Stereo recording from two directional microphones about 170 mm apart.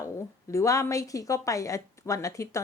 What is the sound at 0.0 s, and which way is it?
A woman's voice, 20° left (ahead or behind).